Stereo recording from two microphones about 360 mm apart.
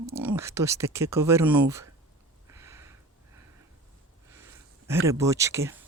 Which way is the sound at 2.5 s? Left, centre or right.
Centre.